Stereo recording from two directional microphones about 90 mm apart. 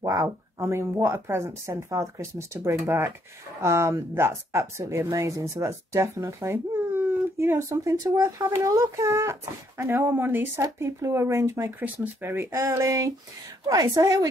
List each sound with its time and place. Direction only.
0.0 s a woman's voice: 35° right (ahead or behind)
6.5 s speech: 25° right (ahead or behind)
11.8 s speech: 20° right (ahead or behind)
12.4 s speech: 35° right (ahead or behind)
13.7 s a woman's voice: 40° right (ahead or behind)